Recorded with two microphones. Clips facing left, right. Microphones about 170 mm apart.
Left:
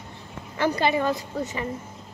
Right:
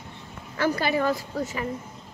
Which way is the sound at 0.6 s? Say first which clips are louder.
Left 1 dB; 20° left (ahead or behind).